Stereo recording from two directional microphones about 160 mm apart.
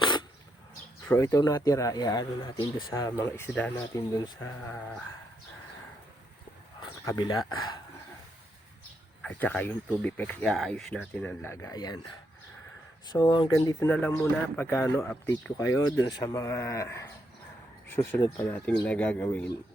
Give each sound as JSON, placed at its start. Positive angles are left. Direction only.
{"t": 0.0, "sound": "a sound", "side_deg": 30}
{"t": 1.0, "sound": "speech", "side_deg": 15}
{"t": 4.2, "sound": "speech", "side_deg": 25}
{"t": 4.7, "sound": "speech", "side_deg": 5}
{"t": 6.7, "sound": "speech", "side_deg": 25}
{"t": 9.2, "sound": "speech", "side_deg": 10}
{"t": 13.1, "sound": "speech", "side_deg": 25}
{"t": 15.5, "sound": "speech", "side_deg": 20}